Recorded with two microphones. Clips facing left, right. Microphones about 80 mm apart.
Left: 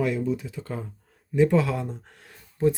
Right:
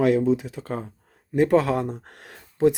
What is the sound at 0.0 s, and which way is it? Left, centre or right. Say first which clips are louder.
Speech: right 6 dB; right.